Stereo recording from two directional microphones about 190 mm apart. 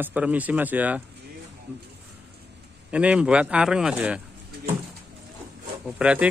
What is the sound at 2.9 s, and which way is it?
Speech, 5° right (ahead or behind).